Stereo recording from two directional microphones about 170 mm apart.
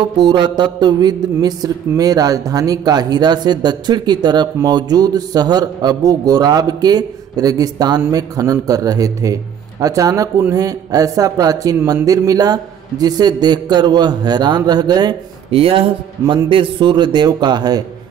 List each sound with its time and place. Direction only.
0.3 s speech: 25° right (ahead or behind)